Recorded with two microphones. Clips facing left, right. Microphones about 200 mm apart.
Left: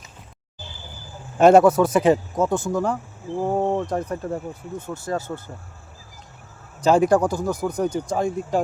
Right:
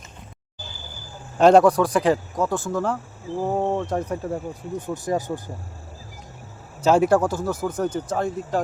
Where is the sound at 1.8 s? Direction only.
20° left (ahead or behind).